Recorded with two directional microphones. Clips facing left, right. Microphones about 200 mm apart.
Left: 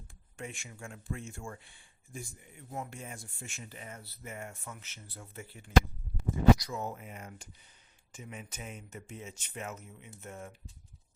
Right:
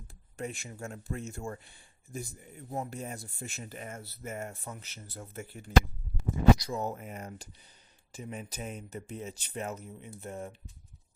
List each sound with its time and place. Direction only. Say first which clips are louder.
0.3 s speech: right 5 dB; 40° right (ahead or behind)
6.6 s speech: right 4 dB; 35° right (ahead or behind)